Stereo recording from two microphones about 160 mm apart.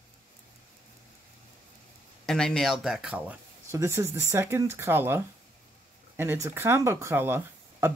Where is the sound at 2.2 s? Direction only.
5° left (ahead or behind).